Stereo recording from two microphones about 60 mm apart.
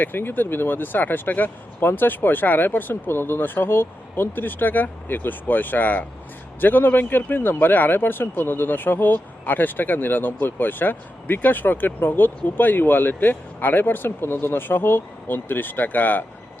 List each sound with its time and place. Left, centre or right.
0.0 s a man's voice: left